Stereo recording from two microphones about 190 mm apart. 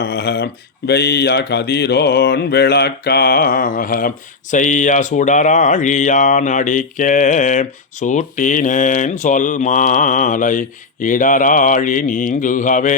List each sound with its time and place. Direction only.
0.0 s speech: 60° left (ahead or behind); by 12.9 s 45° left (ahead or behind)